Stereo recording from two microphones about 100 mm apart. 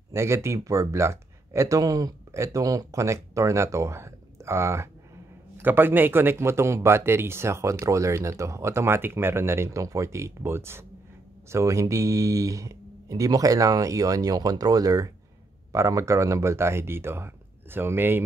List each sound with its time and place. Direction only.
0.1 s speech: 30° right (ahead or behind)